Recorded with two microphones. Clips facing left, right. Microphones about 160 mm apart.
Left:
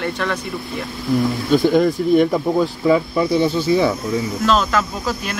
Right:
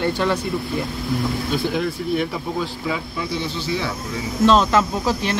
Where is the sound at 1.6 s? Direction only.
50° left (ahead or behind).